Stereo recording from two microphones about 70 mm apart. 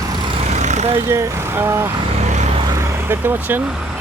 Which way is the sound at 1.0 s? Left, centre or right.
Right.